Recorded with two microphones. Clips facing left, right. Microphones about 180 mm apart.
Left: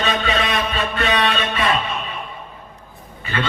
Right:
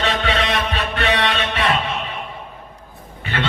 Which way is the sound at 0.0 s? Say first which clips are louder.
Even; 70° right (ahead or behind).